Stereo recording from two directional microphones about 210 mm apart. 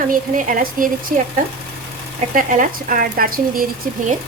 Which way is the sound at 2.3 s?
40° right (ahead or behind).